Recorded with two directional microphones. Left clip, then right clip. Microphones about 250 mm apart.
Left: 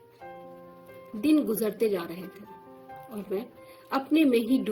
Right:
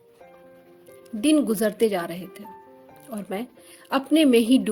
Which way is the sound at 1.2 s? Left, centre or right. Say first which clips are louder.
Right 4 dB; right.